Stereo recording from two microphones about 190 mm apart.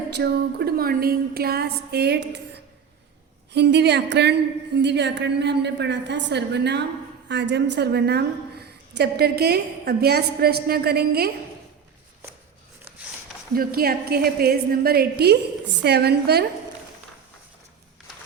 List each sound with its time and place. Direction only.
0.1 s a woman's voice: 60° right (ahead or behind)
3.5 s a woman's voice: 65° right (ahead or behind)
13.6 s a woman's voice: 55° right (ahead or behind)